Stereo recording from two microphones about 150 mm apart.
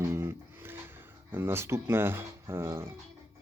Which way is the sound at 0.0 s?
15° right (ahead or behind).